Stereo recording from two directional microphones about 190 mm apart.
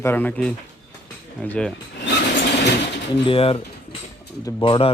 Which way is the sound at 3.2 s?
30° left (ahead or behind).